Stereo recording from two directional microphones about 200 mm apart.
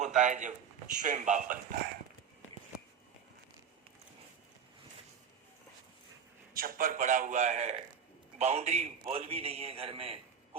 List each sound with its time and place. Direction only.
0.0 s a man's voice: 40° right (ahead or behind)
6.5 s a man's voice: 45° right (ahead or behind); by 10.6 s 30° right (ahead or behind)